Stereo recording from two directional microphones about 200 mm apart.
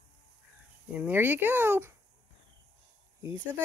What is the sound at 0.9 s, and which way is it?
Speech, 10° right (ahead or behind).